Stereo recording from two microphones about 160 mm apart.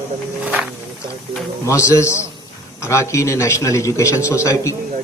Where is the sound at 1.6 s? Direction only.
20° left (ahead or behind).